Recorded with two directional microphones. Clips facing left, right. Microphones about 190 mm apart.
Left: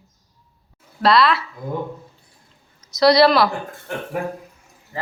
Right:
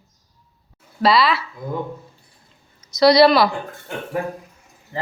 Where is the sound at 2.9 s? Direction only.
Centre (ahead or behind).